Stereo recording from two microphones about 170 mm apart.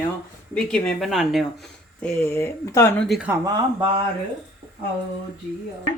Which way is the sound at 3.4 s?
25° right (ahead or behind).